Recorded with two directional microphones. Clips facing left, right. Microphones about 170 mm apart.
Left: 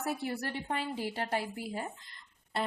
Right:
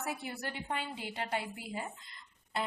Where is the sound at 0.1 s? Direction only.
40° left (ahead or behind).